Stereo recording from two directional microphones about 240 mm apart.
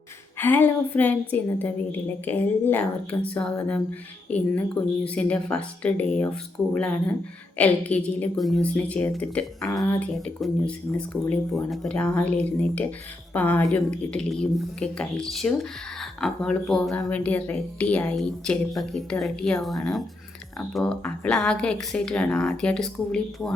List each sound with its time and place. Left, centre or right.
0.3 s a woman's voice: centre